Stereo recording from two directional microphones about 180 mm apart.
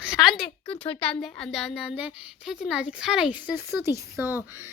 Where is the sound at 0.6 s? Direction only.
30° left (ahead or behind).